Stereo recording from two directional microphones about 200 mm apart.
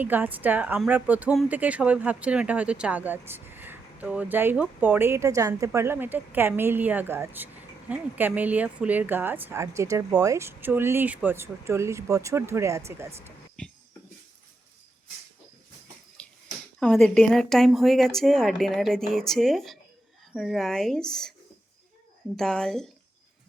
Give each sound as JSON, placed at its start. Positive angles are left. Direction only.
{"t": 0.0, "sound": "a woman's voice", "side_deg": -10}
{"t": 16.2, "sound": "a sound", "side_deg": 5}
{"t": 16.8, "sound": "speech", "side_deg": 0}
{"t": 22.4, "sound": "speech", "side_deg": 0}